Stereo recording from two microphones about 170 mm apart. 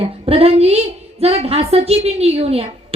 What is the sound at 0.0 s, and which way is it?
A woman's voice, 35° right (ahead or behind).